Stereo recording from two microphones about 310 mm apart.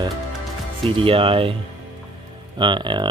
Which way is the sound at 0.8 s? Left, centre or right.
Centre.